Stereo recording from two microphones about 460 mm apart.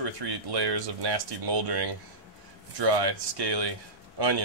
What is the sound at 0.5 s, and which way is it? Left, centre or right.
Speech, right.